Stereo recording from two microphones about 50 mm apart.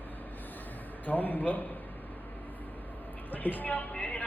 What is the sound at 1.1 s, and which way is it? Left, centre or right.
Speech, left.